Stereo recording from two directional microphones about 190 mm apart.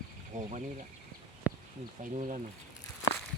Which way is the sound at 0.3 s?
40° right (ahead or behind).